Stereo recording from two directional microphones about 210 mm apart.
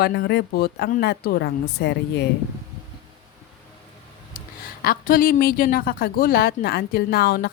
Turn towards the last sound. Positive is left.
turn(degrees=50)  # may be behind; listen again after turning